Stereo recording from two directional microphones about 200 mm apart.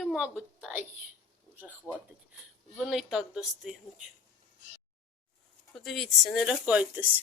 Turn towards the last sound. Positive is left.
turn(degrees=-10)  # may be behind; listen again after turning